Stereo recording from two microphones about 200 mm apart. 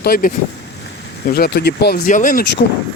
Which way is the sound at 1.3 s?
50° left (ahead or behind).